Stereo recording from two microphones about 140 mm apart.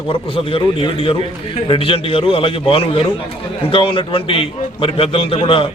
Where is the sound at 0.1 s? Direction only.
40° left (ahead or behind).